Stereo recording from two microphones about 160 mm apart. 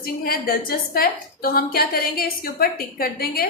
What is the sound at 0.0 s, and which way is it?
A woman's voice, 65° left (ahead or behind).